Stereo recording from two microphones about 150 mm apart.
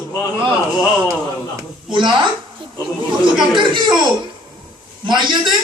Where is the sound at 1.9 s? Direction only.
30° right (ahead or behind).